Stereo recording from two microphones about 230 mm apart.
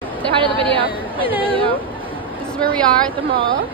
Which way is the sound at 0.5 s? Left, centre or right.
Right.